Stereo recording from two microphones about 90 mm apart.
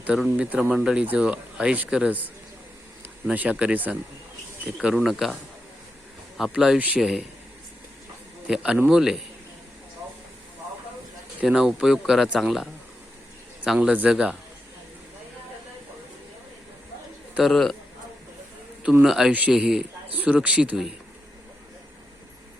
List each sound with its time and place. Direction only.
0.1 s speech: 15° right (ahead or behind)
3.2 s speech: 15° right (ahead or behind)
6.3 s speech: 5° right (ahead or behind)
6.7 s speech: 15° right (ahead or behind)
7.0 s speech: 5° right (ahead or behind)
8.4 s speech: 10° right (ahead or behind)
11.4 s speech: 5° right (ahead or behind)
13.7 s speech: 10° right (ahead or behind)
17.3 s speech: centre (ahead or behind)
19.0 s speech: 5° right (ahead or behind)